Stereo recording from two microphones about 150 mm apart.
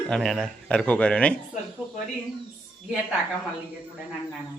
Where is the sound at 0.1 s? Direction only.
Centre (ahead or behind).